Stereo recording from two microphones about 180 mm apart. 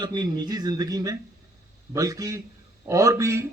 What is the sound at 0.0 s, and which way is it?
Speech, 25° right (ahead or behind).